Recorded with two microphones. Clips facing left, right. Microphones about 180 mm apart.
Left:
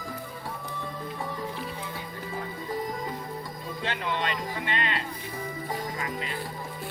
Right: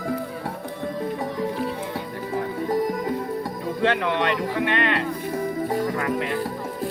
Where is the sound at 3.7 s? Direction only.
65° right (ahead or behind).